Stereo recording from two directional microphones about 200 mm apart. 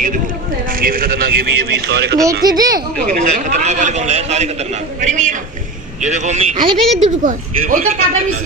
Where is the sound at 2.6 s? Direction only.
45° right (ahead or behind).